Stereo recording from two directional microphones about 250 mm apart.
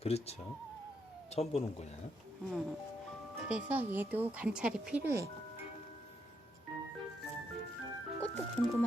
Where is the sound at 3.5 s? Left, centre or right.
Centre.